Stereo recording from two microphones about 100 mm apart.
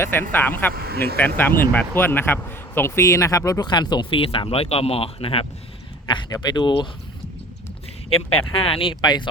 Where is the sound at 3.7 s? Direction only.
50° left (ahead or behind); by 5.4 s 65° left (ahead or behind).